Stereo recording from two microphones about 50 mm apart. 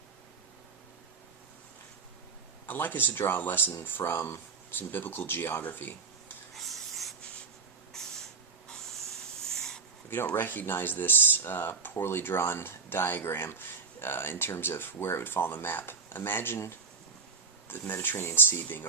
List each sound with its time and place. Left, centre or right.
2.6 s speech: left
5.6 s a sound: left
6.5 s rub: centre
9.5 s a sound: centre
10.3 s speech: left
17.7 s speech: left